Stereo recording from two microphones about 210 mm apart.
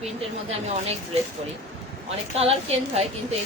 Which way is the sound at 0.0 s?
30° right (ahead or behind).